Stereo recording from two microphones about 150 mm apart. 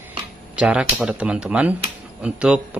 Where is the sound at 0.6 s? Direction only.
10° right (ahead or behind).